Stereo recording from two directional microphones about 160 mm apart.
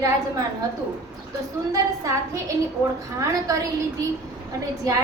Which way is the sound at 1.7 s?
20° right (ahead or behind).